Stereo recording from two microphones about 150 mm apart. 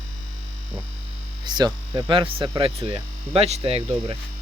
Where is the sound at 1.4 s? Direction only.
25° right (ahead or behind).